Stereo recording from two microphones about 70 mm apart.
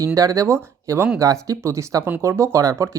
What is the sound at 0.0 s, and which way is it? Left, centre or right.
Speech, right.